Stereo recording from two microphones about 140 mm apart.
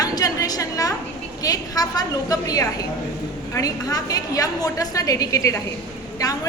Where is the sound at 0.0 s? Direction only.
25° left (ahead or behind).